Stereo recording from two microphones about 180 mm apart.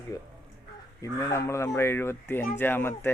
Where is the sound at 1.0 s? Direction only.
15° left (ahead or behind).